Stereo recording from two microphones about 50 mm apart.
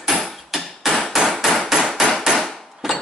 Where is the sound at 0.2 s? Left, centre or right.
Centre.